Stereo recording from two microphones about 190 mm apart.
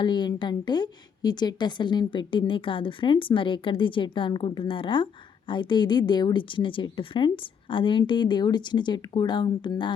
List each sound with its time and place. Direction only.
0.0 s a woman's voice: 25° left (ahead or behind)